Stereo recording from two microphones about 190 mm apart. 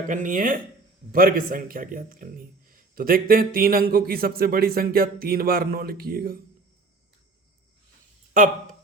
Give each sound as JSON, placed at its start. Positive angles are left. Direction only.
{"t": 0.1, "sound": "a man's voice", "side_deg": -45}